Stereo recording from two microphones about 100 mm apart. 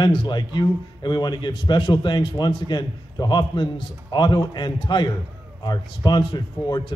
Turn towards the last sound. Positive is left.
turn(degrees=50)  # may be behind; listen again after turning